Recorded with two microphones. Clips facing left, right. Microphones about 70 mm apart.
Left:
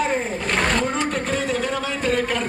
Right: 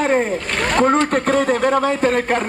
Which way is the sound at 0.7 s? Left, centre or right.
Right.